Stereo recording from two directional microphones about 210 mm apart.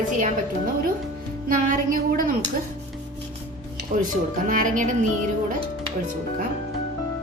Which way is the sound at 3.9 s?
40° right (ahead or behind).